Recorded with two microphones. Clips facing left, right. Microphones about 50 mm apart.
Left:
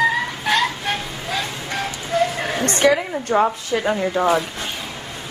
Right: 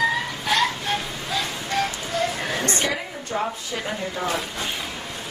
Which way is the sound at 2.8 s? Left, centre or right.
Left.